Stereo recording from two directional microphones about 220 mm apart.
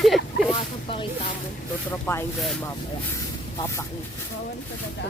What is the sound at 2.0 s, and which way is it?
Speech, 10° left (ahead or behind).